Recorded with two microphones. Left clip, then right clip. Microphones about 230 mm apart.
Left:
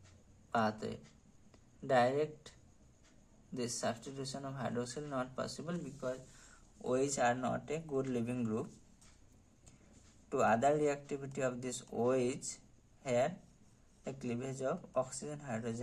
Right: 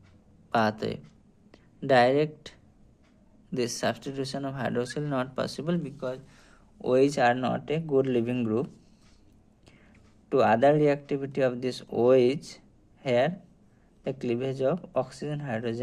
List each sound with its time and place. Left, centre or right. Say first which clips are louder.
0.5 s speech: right 9 dB; right
3.5 s speech: right 10 dB; right
10.2 s speech: right 10 dB; right